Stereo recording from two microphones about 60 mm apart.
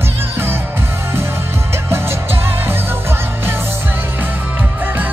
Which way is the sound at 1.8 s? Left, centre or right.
Right.